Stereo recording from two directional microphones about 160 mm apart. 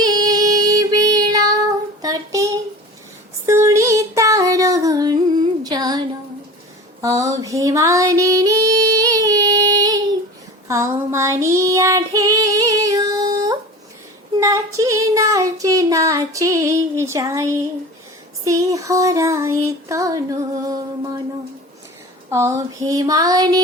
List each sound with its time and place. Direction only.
0.0 s female singing: 25° right (ahead or behind)
2.0 s child singing: 20° right (ahead or behind)
3.4 s female singing: 15° right (ahead or behind)
5.6 s a sound: 25° right (ahead or behind)
7.0 s female singing: 20° right (ahead or behind)
10.7 s child singing: 20° right (ahead or behind)
22.3 s a sound: 20° right (ahead or behind)